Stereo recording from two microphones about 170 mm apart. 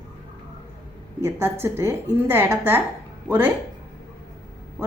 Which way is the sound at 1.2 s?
15° right (ahead or behind).